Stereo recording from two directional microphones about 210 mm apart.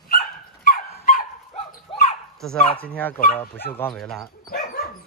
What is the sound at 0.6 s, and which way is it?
Dog, 40° left (ahead or behind).